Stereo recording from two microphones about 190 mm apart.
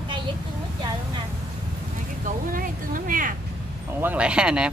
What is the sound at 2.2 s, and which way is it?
Speech, 45° right (ahead or behind).